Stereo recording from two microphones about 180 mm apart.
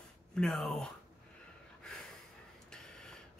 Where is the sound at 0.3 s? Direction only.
5° left (ahead or behind).